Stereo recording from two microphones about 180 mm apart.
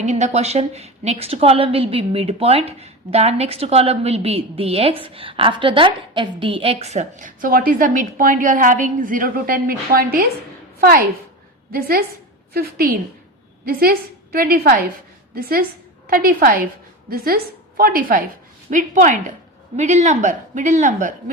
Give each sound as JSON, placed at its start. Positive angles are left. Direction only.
{"t": 0.0, "sound": "a woman's voice", "side_deg": -40}